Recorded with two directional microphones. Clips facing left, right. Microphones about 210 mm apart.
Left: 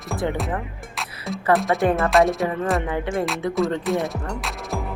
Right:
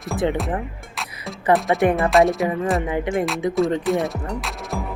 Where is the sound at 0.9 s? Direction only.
Centre (ahead or behind).